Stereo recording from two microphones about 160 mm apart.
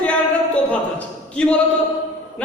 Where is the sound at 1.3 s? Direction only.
5° left (ahead or behind).